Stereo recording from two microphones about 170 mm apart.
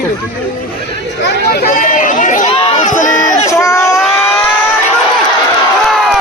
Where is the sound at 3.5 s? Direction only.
15° left (ahead or behind).